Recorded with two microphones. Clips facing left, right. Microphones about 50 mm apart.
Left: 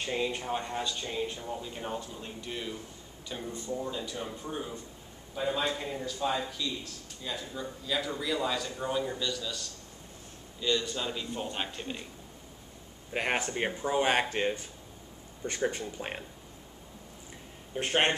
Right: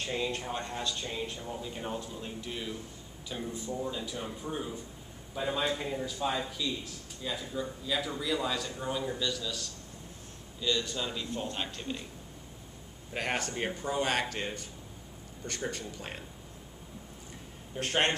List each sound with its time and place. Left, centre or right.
0.0 s a man's voice: centre
13.1 s speech: centre
17.7 s speech: left